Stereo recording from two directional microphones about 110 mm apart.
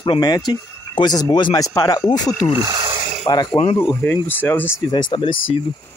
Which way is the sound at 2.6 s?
40° right (ahead or behind).